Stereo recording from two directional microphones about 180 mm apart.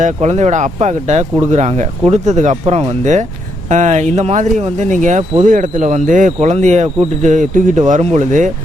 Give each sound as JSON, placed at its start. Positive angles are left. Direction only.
{"t": 0.0, "sound": "speech", "side_deg": -40}